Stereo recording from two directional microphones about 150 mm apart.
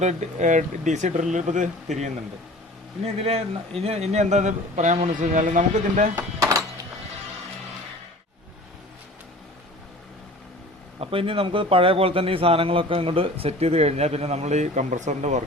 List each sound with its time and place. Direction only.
0.0 s a man's voice: 50° right (ahead or behind)
3.0 s a man's voice: 40° right (ahead or behind)
6.1 s speech: 20° right (ahead or behind)
11.0 s a man's voice: 35° right (ahead or behind)